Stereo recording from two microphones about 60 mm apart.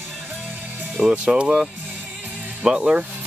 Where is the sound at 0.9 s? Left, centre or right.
Centre.